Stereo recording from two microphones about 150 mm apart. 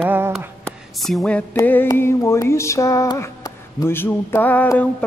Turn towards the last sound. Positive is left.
turn(degrees=10)  # may be behind; listen again after turning